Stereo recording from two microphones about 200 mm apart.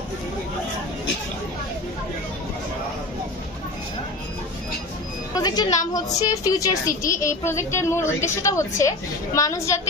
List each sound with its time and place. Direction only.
5.3 s a woman's voice: 20° left (ahead or behind)